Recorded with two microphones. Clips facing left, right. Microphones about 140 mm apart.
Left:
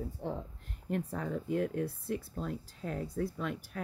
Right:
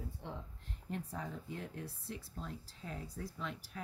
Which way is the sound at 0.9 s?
60° left (ahead or behind).